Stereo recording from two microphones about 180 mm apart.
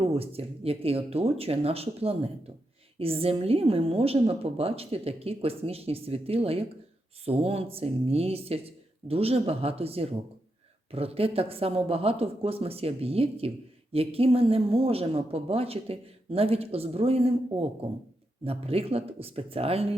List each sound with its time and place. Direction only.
0.0 s speech: 30° right (ahead or behind)